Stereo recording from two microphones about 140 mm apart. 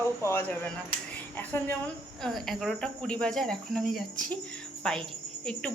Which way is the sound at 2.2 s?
Centre (ahead or behind).